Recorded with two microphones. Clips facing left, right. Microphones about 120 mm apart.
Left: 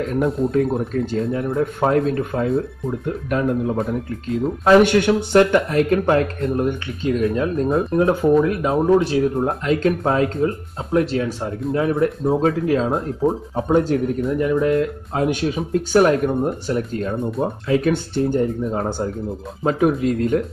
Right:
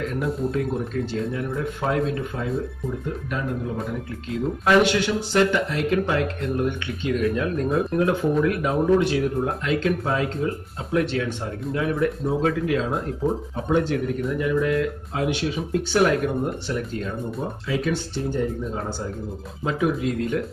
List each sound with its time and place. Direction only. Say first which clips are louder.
0.0 s speech: left 5 dB; 40° left (ahead or behind)
1.8 s speech: left 5 dB; 50° left (ahead or behind)
4.8 s speech: left 6 dB; 55° left (ahead or behind)
17.4 s speech: left 8 dB; 55° left (ahead or behind)